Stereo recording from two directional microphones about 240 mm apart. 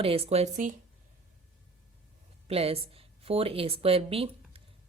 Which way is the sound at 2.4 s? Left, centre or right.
Right.